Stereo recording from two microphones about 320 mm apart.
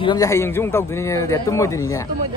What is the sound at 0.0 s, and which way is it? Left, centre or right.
A man's voice, centre.